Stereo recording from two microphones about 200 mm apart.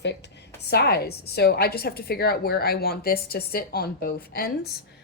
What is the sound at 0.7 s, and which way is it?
A woman's voice, 55° left (ahead or behind).